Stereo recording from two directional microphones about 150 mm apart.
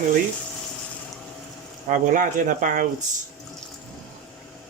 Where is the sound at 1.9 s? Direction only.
60° right (ahead or behind).